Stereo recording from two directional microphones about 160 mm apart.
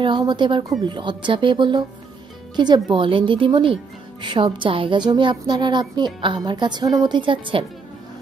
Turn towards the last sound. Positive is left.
turn(degrees=-30)  # may be behind; listen again after turning